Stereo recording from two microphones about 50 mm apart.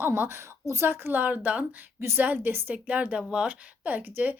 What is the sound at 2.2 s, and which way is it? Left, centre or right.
Speech, right.